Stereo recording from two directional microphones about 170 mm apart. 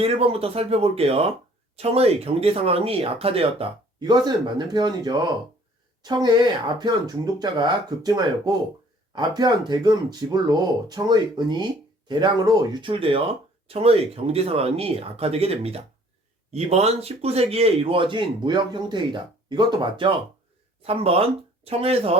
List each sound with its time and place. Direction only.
0.0 s speech: 35° right (ahead or behind)